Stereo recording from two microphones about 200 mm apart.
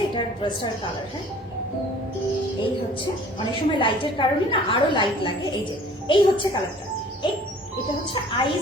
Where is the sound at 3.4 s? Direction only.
25° left (ahead or behind).